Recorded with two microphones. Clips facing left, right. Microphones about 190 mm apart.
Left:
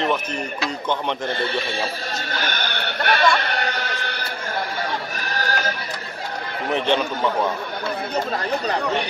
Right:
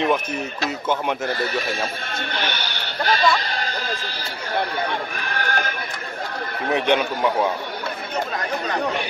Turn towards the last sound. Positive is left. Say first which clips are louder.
# right 1 dB
turn(degrees=-10)  # may be behind; listen again after turning